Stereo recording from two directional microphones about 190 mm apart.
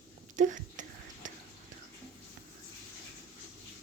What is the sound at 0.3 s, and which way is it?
Whispering, 40° right (ahead or behind).